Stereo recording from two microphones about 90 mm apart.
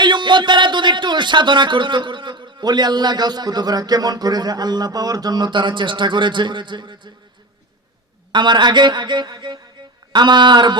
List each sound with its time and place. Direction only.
0.0 s speech: 60° right (ahead or behind)
8.3 s speech: 60° right (ahead or behind)